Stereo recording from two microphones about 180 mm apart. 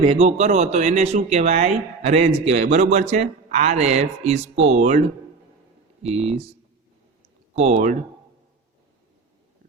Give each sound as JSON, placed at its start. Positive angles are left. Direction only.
{"t": 0.0, "sound": "speech", "side_deg": -35}
{"t": 7.5, "sound": "speech", "side_deg": -35}